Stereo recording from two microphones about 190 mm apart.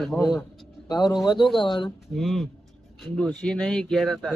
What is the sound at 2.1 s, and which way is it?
Speech, centre (ahead or behind).